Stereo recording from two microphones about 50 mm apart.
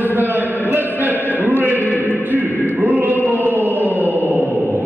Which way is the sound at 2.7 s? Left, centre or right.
Right.